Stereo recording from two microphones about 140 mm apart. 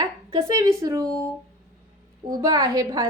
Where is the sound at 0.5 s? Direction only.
20° right (ahead or behind).